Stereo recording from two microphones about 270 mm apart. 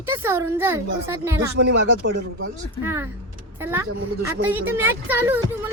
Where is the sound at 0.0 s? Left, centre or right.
Centre.